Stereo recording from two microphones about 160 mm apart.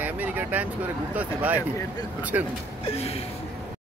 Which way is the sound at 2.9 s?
40° left (ahead or behind).